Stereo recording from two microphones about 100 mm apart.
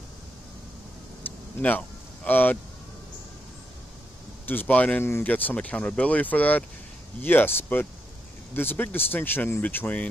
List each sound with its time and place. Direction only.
1.2 s vehicle: 15° left (ahead or behind)
4.5 s speech: 15° left (ahead or behind)